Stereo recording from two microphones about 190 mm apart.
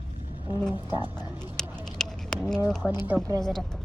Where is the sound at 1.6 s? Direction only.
5° left (ahead or behind).